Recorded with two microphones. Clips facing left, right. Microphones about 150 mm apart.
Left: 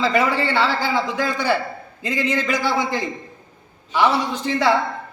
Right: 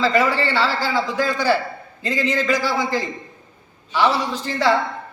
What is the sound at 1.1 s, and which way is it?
A man's voice, 20° left (ahead or behind).